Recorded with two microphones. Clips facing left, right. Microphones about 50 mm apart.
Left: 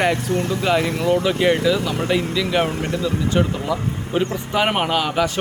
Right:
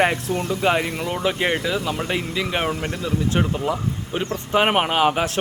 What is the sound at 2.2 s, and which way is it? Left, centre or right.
Speech, right.